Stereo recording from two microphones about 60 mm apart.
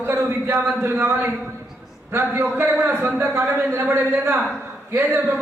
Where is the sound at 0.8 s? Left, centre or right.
Right.